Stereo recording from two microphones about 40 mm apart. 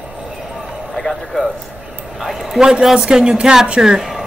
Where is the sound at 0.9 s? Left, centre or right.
Centre.